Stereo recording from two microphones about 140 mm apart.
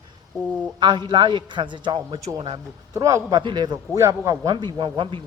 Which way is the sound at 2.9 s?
25° right (ahead or behind).